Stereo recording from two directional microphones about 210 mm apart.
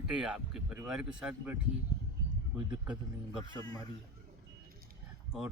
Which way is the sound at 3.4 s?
15° left (ahead or behind).